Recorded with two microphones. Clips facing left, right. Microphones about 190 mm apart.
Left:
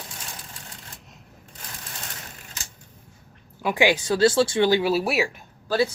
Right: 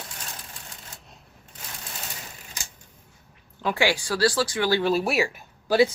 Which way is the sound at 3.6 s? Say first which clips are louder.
Left 3 dB; 15° left (ahead or behind).